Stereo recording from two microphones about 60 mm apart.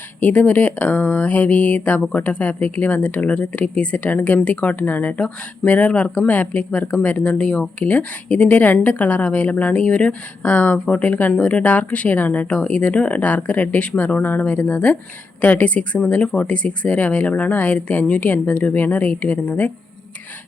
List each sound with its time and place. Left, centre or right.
0.2 s speech: left